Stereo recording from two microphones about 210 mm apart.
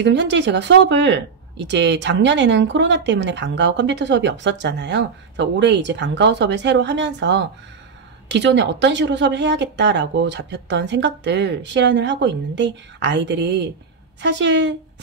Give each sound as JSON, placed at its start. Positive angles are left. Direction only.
{"t": 0.0, "sound": "speech", "side_deg": -60}